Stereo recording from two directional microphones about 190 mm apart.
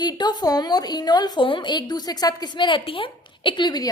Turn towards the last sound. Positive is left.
turn(degrees=25)  # may be behind; listen again after turning